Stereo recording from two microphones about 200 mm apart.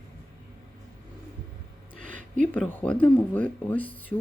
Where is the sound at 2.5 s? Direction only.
5° left (ahead or behind).